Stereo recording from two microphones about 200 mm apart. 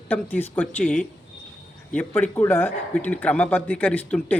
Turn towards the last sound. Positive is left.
turn(degrees=10)  # may be behind; listen again after turning